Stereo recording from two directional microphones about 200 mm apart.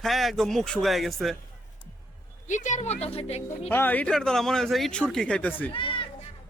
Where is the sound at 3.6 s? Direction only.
10° left (ahead or behind).